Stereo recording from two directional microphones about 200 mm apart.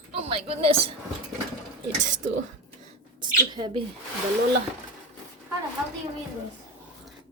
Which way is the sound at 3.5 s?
25° right (ahead or behind).